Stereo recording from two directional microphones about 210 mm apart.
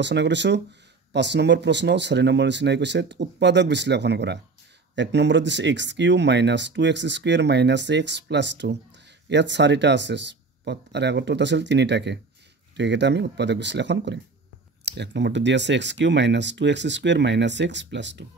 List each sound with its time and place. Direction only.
0.0 s speech: 55° right (ahead or behind)